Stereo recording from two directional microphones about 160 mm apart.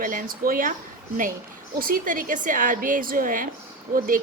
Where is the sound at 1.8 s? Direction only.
60° right (ahead or behind).